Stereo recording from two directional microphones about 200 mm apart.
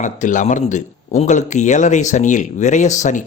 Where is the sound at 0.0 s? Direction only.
40° left (ahead or behind).